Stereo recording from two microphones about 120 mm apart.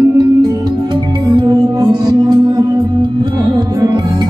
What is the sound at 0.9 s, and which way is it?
Music, 35° right (ahead or behind).